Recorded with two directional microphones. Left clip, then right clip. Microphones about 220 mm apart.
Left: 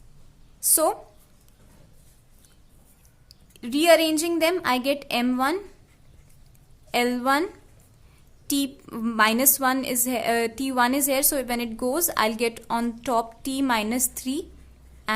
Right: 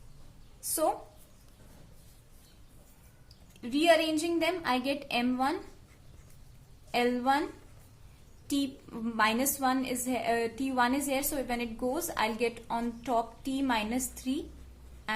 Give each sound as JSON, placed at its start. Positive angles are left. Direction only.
{"t": 3.6, "sound": "a woman's voice", "side_deg": 50}
{"t": 6.9, "sound": "a woman's voice", "side_deg": 50}
{"t": 8.4, "sound": "a woman's voice", "side_deg": 50}